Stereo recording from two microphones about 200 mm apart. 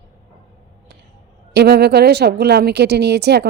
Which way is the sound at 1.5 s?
55° right (ahead or behind).